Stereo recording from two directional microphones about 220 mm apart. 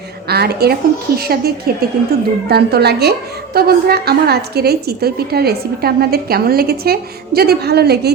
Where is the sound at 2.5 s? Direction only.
45° right (ahead or behind).